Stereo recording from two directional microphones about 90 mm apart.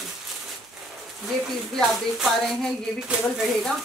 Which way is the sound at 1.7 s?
5° left (ahead or behind).